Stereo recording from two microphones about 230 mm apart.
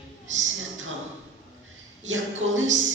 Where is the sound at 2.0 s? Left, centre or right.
Right.